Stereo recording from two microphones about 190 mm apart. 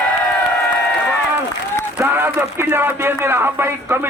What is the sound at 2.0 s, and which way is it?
A man's voice, 10° right (ahead or behind).